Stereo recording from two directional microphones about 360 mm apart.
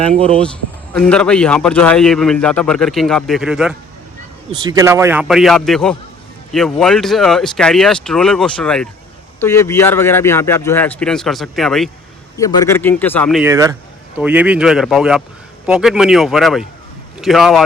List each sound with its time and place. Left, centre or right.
0.0 s speech: centre
0.3 s a man's voice: centre